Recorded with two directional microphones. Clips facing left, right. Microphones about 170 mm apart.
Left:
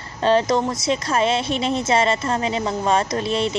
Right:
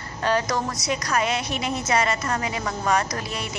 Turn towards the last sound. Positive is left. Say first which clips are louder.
# left 9 dB
turn(degrees=25)  # may be behind; listen again after turning